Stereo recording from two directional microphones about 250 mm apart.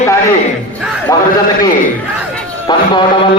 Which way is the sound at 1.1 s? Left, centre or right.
Centre.